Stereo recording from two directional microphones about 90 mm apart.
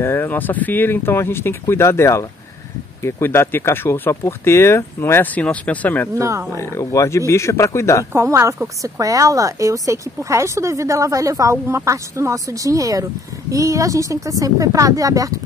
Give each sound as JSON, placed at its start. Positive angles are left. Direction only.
{"t": 0.0, "sound": "speech", "side_deg": 25}
{"t": 5.3, "sound": "speech", "side_deg": 15}
{"t": 6.1, "sound": "speech", "side_deg": -35}
{"t": 6.5, "sound": "speech", "side_deg": 30}
{"t": 8.1, "sound": "speech", "side_deg": -30}